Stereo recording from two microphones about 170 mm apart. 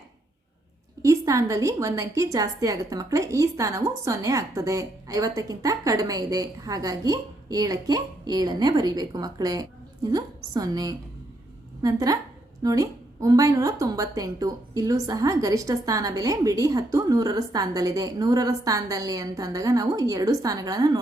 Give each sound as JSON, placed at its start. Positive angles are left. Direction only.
{"t": 1.0, "sound": "a woman's voice", "side_deg": -20}